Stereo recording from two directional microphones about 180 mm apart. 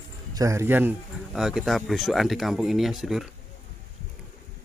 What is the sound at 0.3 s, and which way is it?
Speech, 15° right (ahead or behind).